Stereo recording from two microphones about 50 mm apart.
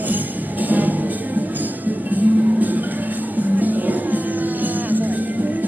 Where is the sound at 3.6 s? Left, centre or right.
Right.